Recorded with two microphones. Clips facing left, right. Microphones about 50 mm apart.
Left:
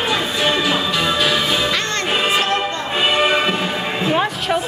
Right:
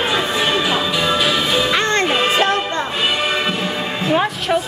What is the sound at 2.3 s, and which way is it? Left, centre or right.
Music, right.